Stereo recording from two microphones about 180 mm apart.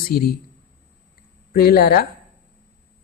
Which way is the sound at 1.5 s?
60° left (ahead or behind).